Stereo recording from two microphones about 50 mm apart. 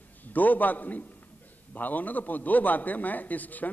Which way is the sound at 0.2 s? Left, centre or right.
Left.